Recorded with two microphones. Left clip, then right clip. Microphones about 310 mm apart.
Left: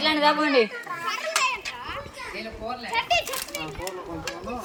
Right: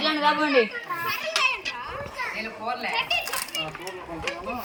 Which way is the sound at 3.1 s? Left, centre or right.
Left.